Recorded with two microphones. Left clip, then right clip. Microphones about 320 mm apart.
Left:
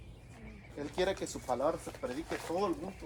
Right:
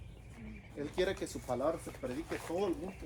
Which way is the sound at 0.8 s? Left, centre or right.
Centre.